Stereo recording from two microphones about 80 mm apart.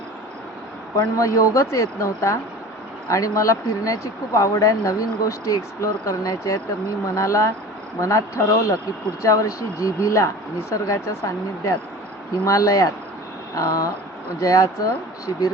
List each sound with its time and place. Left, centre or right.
0.9 s speech: left
15.3 s speech: left